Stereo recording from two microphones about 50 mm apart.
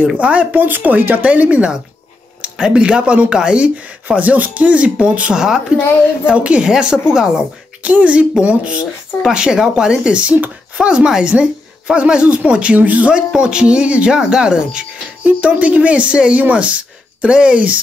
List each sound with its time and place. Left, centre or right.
0.1 s speech: right
0.6 s speech: right
5.3 s speech: centre
6.2 s speech: right
13.4 s speech: centre
15.2 s speech: right